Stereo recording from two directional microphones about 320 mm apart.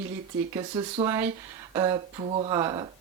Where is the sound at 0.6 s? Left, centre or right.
Centre.